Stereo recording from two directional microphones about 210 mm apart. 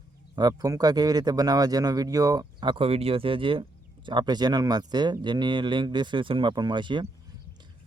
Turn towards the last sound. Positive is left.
turn(degrees=-20)  # may be behind; listen again after turning